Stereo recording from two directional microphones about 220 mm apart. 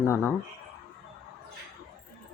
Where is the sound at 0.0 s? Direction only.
10° left (ahead or behind).